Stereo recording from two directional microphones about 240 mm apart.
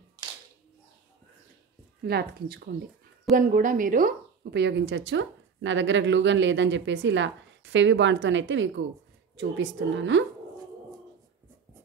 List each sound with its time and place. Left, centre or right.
2.0 s a woman's voice: right